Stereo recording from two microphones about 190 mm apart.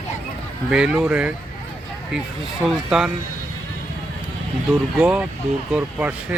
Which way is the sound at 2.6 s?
5° right (ahead or behind).